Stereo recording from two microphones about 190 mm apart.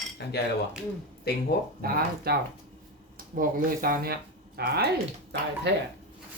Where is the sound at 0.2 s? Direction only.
60° left (ahead or behind).